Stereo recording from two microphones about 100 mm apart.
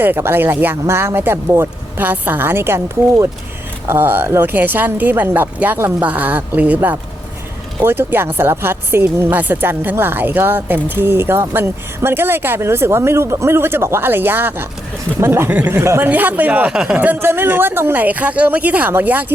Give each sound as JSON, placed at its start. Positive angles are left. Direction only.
{"t": 0.0, "sound": "speech", "side_deg": -20}
{"t": 15.8, "sound": "a woman's voice", "side_deg": -25}